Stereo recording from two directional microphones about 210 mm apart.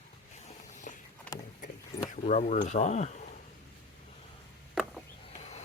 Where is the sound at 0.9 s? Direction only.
40° left (ahead or behind).